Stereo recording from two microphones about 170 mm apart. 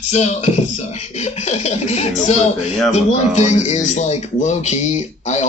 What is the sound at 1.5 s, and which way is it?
Speech, 40° left (ahead or behind).